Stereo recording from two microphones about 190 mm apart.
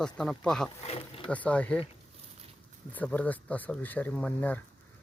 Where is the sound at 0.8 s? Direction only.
30° left (ahead or behind).